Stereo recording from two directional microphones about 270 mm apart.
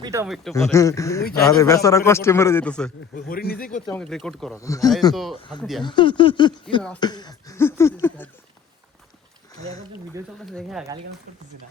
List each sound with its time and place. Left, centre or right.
0.0 s a man's voice: centre
0.5 s a man's voice: centre
3.2 s speech: left
3.8 s speech: centre
4.6 s a man's voice: centre
5.1 s speech: centre
5.4 s a man's voice: centre
10.4 s speech: centre